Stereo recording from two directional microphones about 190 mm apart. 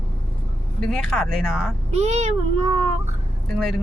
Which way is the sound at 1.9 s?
35° right (ahead or behind).